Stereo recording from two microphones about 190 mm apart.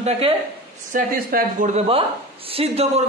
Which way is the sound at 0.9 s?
45° right (ahead or behind).